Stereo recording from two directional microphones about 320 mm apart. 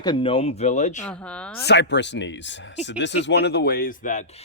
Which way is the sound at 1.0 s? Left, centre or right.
Centre.